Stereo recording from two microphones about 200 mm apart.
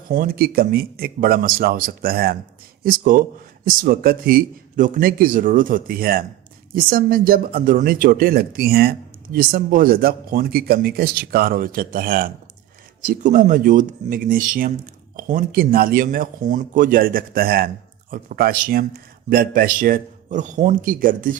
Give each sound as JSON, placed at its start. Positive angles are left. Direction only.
{"t": 0.1, "sound": "speech", "side_deg": -45}